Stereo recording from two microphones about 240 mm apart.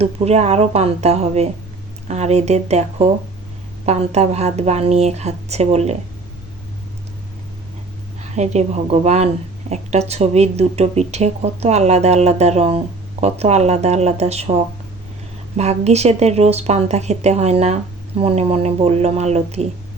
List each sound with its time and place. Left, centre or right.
0.0 s a woman's voice: right
8.4 s a woman's voice: right